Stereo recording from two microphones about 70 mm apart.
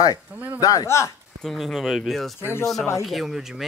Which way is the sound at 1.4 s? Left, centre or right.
Centre.